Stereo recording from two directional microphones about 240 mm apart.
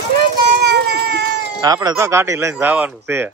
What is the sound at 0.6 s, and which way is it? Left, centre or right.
Baby cry, right.